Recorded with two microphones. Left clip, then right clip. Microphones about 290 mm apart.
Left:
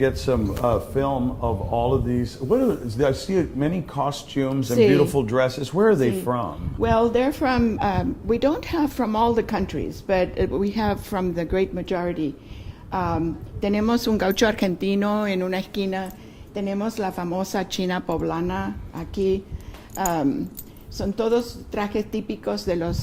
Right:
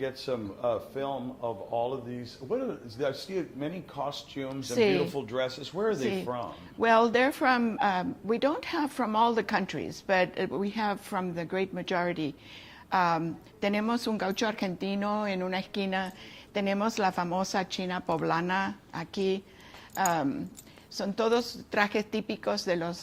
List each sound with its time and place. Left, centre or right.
0.0 s a man's voice: left
4.6 s speech: centre
4.9 s a man's voice: left
6.7 s speech: right; by 18.1 s centre
18.1 s speech: right